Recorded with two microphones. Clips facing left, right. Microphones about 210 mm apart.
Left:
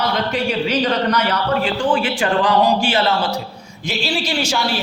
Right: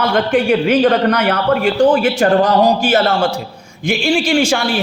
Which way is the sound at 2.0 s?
40° right (ahead or behind).